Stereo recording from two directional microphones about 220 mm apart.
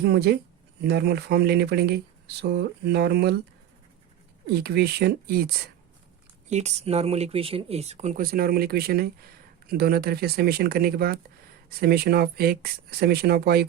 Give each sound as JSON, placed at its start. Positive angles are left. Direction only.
{"t": 0.0, "sound": "speech", "side_deg": -45}
{"t": 4.4, "sound": "speech", "side_deg": -45}
{"t": 6.5, "sound": "speech", "side_deg": -30}